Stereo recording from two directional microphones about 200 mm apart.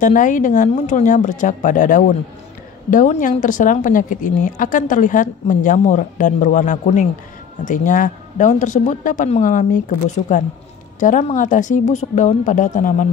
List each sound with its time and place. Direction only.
0.0 s speech: 40° left (ahead or behind)